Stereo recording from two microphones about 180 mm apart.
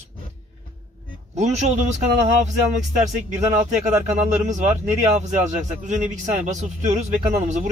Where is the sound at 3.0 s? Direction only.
40° right (ahead or behind).